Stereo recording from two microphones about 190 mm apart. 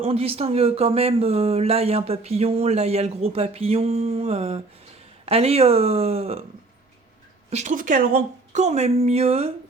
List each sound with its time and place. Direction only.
0.0 s speech: 30° right (ahead or behind)
7.5 s speech: 40° right (ahead or behind)